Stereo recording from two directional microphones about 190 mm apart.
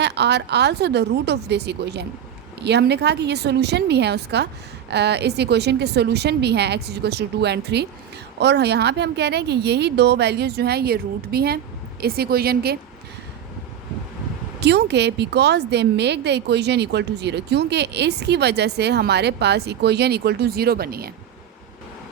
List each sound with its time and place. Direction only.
0.0 s speech: 60° right (ahead or behind)
14.6 s speech: 60° right (ahead or behind)